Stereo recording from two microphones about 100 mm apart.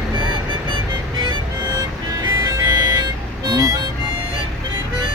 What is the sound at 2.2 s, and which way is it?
Music, 40° right (ahead or behind).